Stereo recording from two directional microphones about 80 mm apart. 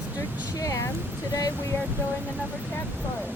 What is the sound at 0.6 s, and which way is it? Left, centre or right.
Speech, left.